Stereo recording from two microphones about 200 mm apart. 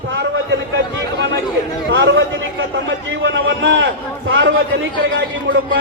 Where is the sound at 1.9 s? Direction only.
65° right (ahead or behind).